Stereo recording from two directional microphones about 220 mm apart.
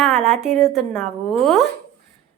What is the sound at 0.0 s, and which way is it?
A child's voice, centre (ahead or behind).